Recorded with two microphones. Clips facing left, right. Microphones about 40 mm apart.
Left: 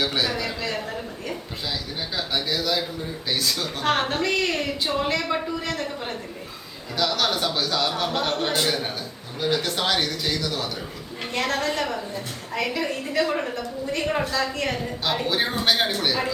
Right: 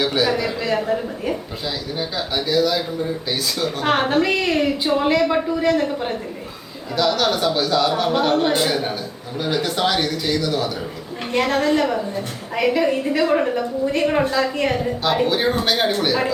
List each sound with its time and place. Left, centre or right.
0.0 s a sound: centre
1.6 s a man's voice: centre
15.0 s a man's voice: centre